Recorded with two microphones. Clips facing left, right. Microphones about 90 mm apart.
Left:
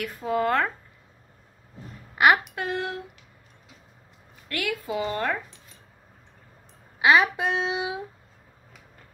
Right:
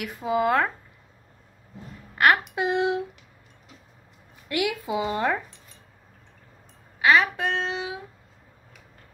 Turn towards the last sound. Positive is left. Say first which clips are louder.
# left 1 dB
turn(degrees=5)  # may be behind; listen again after turning